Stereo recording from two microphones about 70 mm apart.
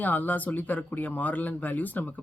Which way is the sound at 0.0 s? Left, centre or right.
Left.